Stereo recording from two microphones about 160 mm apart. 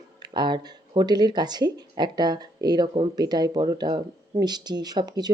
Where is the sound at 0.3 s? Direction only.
30° right (ahead or behind).